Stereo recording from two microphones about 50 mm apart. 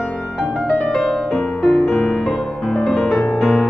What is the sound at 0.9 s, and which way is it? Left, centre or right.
Music, centre.